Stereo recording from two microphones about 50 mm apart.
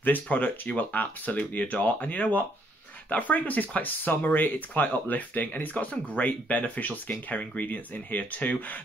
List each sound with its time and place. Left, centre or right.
0.0 s speech: left